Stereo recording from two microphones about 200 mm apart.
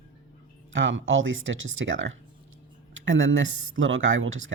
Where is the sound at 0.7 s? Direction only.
70° right (ahead or behind).